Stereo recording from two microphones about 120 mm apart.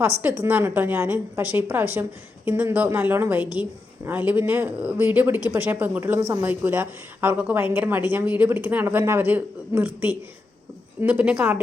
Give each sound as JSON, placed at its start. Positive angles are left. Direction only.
{"t": 0.0, "sound": "a woman's voice", "side_deg": -15}